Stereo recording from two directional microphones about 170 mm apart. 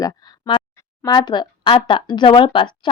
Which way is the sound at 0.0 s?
25° left (ahead or behind).